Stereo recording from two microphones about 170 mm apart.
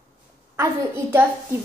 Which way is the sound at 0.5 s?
15° right (ahead or behind).